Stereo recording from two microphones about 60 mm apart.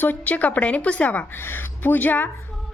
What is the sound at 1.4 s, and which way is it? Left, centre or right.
Speech, left.